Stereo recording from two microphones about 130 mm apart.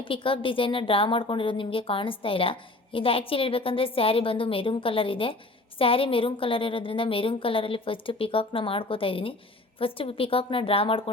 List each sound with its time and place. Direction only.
0.0 s a woman's voice: 40° left (ahead or behind)